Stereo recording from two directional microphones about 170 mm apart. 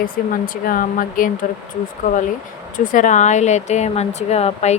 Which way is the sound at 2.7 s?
50° left (ahead or behind).